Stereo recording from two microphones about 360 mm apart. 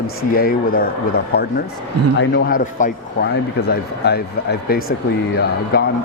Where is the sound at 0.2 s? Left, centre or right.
Left.